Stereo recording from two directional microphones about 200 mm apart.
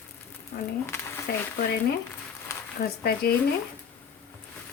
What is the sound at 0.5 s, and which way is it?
Speech, 55° left (ahead or behind).